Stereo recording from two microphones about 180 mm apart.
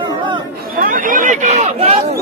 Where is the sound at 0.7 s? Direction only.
50° right (ahead or behind).